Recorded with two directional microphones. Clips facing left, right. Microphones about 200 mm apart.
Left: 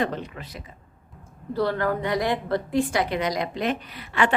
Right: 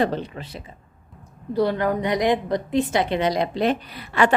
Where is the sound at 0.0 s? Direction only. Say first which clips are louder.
Right 4 dB; 30° right (ahead or behind).